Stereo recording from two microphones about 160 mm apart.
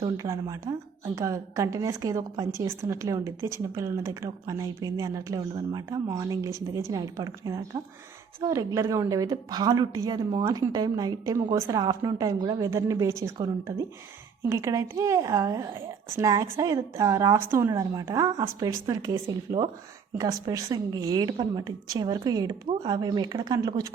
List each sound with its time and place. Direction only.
0.0 s a woman's voice: 20° right (ahead or behind)